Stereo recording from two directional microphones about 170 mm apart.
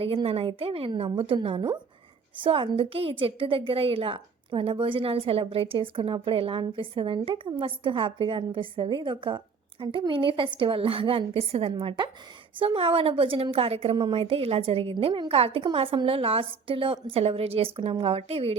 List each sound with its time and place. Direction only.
0.0 s a woman's voice: 35° right (ahead or behind)